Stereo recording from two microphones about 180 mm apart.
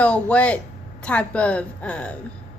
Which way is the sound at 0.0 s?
5° left (ahead or behind).